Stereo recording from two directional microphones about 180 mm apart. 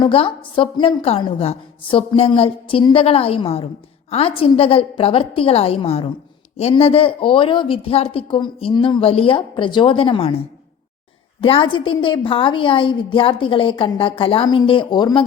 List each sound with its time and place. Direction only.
0.0 s a woman's voice: 30° left (ahead or behind)